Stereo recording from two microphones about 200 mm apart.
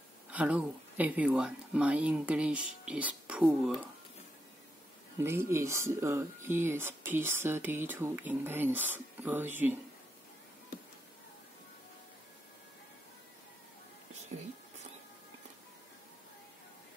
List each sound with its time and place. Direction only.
0.3 s speech: 5° right (ahead or behind)
5.2 s speech: 10° right (ahead or behind)
14.3 s speech: 35° right (ahead or behind)